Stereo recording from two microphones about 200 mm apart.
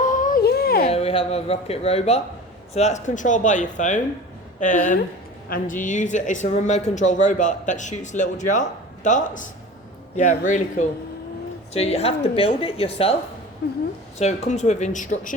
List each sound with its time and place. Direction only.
0.0 s a sound: 40° left (ahead or behind)
0.9 s a woman's voice: 30° left (ahead or behind)
13.6 s a woman's voice: 55° left (ahead or behind)
14.2 s speech: 35° left (ahead or behind)